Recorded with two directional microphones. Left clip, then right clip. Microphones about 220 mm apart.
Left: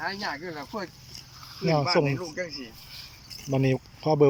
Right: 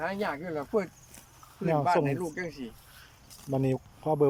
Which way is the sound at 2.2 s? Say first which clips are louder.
Left 1 dB; 50° right (ahead or behind).